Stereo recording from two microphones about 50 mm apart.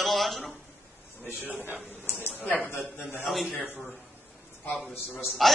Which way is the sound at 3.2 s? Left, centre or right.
Centre.